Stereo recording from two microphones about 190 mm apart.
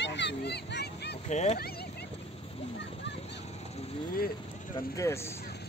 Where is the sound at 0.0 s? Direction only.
65° left (ahead or behind).